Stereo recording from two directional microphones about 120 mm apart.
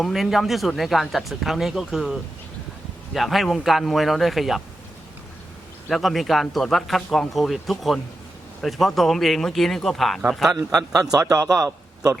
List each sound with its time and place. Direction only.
0.0 s speech: centre (ahead or behind)
5.9 s speech: centre (ahead or behind)
10.5 s a man's voice: 30° right (ahead or behind)